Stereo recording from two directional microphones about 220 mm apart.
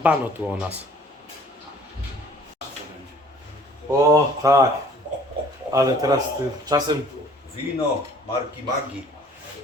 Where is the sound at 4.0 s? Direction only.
15° right (ahead or behind).